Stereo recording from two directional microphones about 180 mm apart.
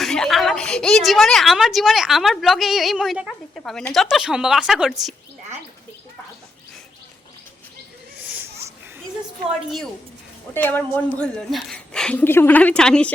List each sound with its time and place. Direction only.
0.0 s a woman's voice: centre (ahead or behind)
10.5 s a woman's voice: 10° left (ahead or behind)